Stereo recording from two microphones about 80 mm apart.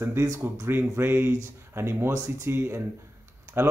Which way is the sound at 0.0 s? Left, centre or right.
Right.